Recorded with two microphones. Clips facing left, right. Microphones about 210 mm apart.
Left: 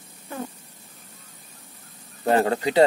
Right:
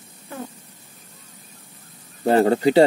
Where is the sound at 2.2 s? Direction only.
30° right (ahead or behind).